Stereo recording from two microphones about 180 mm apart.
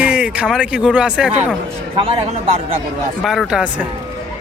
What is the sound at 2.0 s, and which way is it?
Speech, 30° right (ahead or behind).